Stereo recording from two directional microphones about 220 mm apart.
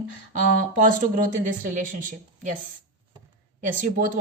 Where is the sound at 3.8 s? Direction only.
40° right (ahead or behind).